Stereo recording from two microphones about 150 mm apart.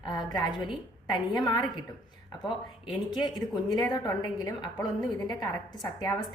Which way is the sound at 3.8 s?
25° left (ahead or behind).